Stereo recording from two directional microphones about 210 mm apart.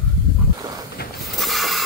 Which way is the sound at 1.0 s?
50° left (ahead or behind).